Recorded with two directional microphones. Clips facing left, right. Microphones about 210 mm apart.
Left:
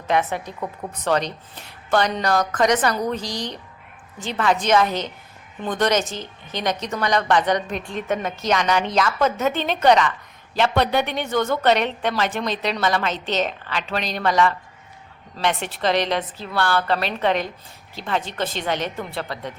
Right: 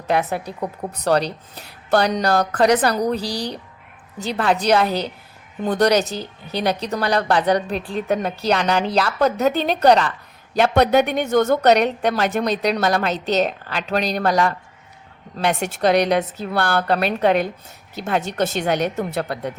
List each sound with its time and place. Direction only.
0.1 s speech: 35° right (ahead or behind)